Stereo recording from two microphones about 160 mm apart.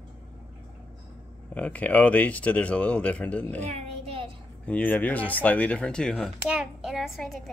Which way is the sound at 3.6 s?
40° right (ahead or behind).